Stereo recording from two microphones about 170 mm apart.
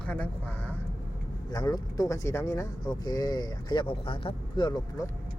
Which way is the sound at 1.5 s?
25° left (ahead or behind).